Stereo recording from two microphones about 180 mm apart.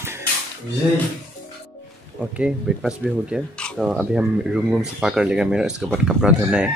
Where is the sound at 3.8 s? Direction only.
5° right (ahead or behind).